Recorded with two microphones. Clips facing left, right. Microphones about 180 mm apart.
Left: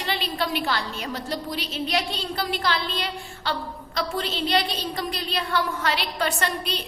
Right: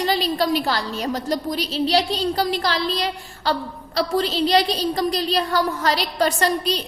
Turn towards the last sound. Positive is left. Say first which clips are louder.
# right 6 dB
turn(degrees=-40)  # may be behind; listen again after turning